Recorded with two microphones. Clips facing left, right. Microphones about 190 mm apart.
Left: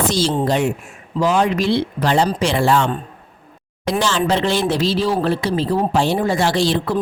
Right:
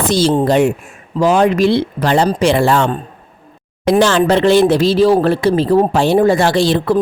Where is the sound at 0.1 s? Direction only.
55° right (ahead or behind).